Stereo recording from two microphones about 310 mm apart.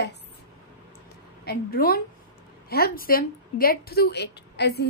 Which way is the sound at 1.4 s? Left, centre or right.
Left.